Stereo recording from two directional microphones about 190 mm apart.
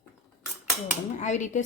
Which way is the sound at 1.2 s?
40° left (ahead or behind).